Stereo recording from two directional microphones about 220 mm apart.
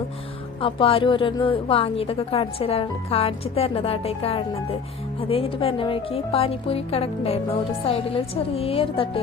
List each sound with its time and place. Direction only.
0.6 s a woman's voice: 25° left (ahead or behind)